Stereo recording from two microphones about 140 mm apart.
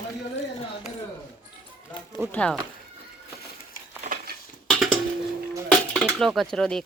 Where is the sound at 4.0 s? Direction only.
80° right.